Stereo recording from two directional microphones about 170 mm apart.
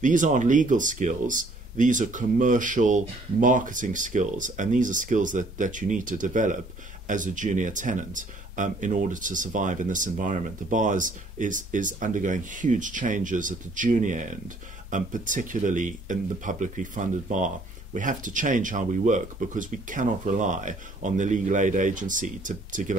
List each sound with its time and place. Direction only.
0.0 s speech: 50° right (ahead or behind)